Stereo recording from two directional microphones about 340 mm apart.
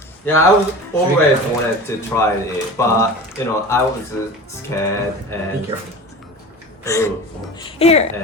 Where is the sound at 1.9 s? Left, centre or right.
Centre.